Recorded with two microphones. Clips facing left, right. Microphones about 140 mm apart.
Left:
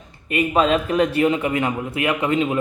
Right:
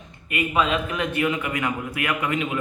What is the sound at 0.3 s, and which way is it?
A man's voice, 35° left (ahead or behind).